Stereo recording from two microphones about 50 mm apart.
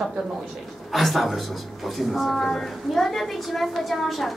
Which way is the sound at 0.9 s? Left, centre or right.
Centre.